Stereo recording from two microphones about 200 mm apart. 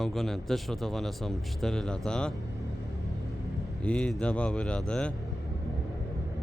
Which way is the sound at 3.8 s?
5° left (ahead or behind).